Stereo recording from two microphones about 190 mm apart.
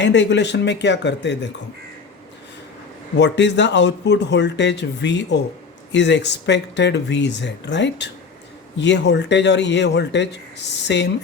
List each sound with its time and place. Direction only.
0.0 s speech: 65° left (ahead or behind)
3.2 s speech: 65° left (ahead or behind)